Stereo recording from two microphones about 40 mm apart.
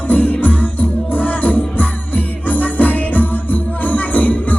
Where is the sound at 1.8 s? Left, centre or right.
Left.